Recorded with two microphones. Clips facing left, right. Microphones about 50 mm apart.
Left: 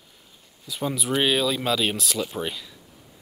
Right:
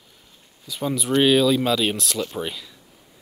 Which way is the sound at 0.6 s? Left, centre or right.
Centre.